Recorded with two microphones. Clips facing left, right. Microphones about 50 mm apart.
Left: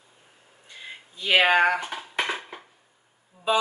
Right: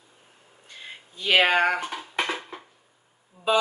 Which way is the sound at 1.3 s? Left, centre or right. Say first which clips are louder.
Left 1 dB; left.